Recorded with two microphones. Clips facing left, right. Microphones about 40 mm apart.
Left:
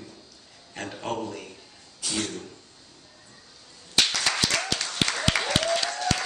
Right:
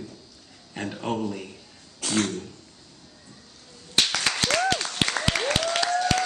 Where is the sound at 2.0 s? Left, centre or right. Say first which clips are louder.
Right 4 dB; right.